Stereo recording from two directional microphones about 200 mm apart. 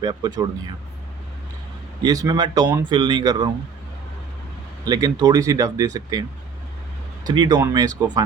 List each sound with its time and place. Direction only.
0.0 s speech: 20° right (ahead or behind)
2.0 s speech: 20° right (ahead or behind)
4.9 s speech: 20° right (ahead or behind)
7.3 s speech: 20° right (ahead or behind)